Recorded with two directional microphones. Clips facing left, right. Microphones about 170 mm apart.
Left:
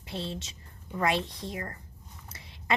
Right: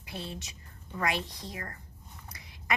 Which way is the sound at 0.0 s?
25° left (ahead or behind).